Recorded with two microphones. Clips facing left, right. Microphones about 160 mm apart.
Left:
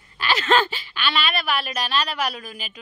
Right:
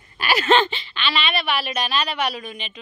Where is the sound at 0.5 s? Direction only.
5° left (ahead or behind).